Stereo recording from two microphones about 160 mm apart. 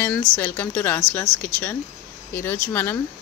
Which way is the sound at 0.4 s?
10° left (ahead or behind).